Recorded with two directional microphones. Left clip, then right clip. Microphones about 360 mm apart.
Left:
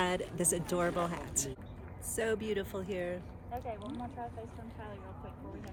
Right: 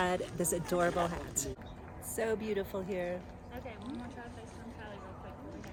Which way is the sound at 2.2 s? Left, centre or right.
Centre.